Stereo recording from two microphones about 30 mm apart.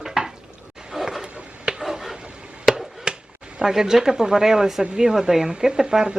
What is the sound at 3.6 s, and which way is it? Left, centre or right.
Speech, centre.